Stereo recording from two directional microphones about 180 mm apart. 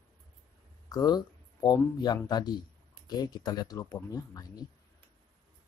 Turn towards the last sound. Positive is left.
turn(degrees=20)  # may be behind; listen again after turning